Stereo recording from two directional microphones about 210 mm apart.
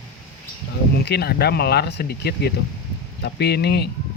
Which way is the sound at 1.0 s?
50° left (ahead or behind).